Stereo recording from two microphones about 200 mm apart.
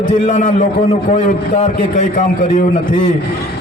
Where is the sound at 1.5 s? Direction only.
35° left (ahead or behind).